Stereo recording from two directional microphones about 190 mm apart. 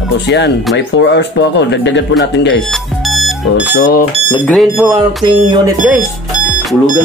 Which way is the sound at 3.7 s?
50° left (ahead or behind).